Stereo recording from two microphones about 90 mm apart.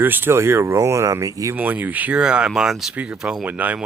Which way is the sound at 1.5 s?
20° right (ahead or behind).